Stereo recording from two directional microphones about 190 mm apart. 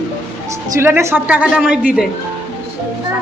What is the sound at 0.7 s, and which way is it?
A woman's voice, 15° right (ahead or behind).